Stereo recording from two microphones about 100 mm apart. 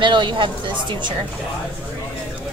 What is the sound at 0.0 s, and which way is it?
Speech, 50° right (ahead or behind).